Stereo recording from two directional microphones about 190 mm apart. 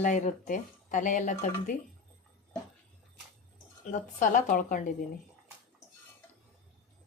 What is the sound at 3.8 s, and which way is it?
A woman's voice, 40° left (ahead or behind).